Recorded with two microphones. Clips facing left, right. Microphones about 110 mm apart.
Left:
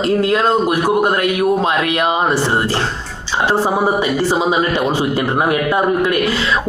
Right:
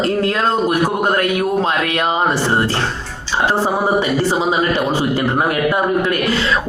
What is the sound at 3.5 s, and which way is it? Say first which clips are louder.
A man's voice: left 2 dB; 15° left (ahead or behind).